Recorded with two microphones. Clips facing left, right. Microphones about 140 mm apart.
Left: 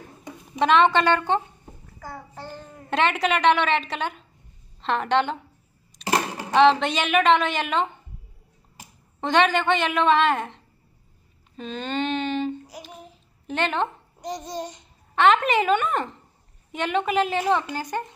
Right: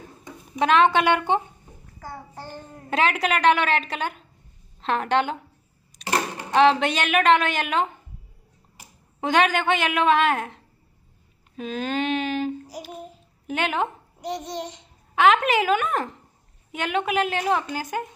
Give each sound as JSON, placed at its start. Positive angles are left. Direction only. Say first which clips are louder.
{"t": 0.6, "sound": "a woman's voice", "louder": "even", "side_deg": -5}
{"t": 2.9, "sound": "a woman's voice", "louder": "even", "side_deg": 0}
{"t": 5.9, "sound": "a sound", "louder": "left 3 dB", "side_deg": 0}
{"t": 6.5, "sound": "a woman's voice", "louder": "left 1 dB", "side_deg": 0}
{"t": 9.2, "sound": "a woman's voice", "louder": "even", "side_deg": -5}
{"t": 11.5, "sound": "a sound", "louder": "right 2 dB", "side_deg": -5}
{"t": 13.5, "sound": "a woman's voice", "louder": "even", "side_deg": -5}
{"t": 14.4, "sound": "babbling", "louder": "even", "side_deg": -25}
{"t": 15.1, "sound": "a woman's voice", "louder": "even", "side_deg": -5}